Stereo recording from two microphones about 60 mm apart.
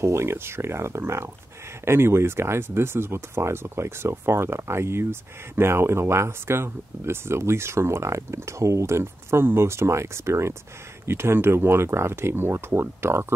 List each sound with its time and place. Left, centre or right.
0.0 s speech: right